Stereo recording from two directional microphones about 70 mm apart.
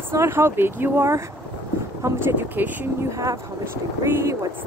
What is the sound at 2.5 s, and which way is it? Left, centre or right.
Speech, right.